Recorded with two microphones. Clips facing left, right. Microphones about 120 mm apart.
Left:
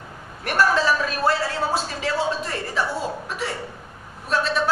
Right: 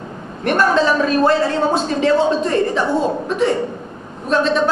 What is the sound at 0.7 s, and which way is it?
Speech, 25° right (ahead or behind).